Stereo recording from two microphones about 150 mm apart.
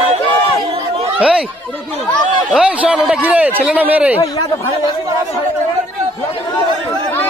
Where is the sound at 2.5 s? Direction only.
5° right (ahead or behind).